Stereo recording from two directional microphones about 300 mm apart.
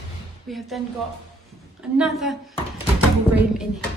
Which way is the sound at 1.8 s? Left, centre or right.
Centre.